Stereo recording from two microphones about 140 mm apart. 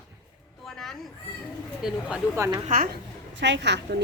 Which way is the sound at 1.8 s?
5° right (ahead or behind).